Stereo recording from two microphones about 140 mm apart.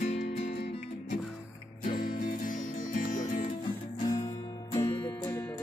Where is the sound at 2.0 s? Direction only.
90° left; by 3.4 s 65° left (ahead or behind).